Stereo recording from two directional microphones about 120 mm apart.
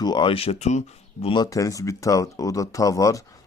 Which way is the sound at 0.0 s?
40° left (ahead or behind).